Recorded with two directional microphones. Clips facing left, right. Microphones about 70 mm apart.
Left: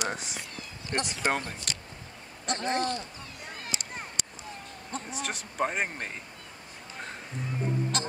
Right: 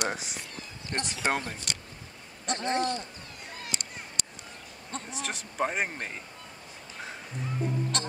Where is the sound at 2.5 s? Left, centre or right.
Centre.